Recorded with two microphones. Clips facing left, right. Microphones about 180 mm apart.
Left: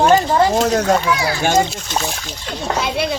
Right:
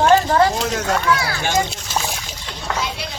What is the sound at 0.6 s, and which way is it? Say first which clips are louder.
Speech: left 7 dB; 35° left (ahead or behind).